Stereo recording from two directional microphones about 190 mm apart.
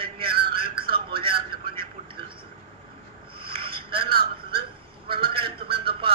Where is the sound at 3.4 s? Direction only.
30° right (ahead or behind).